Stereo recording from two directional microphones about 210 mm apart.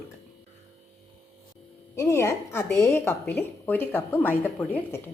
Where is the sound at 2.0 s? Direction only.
15° left (ahead or behind).